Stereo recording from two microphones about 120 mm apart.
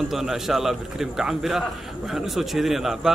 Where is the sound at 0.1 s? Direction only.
5° right (ahead or behind).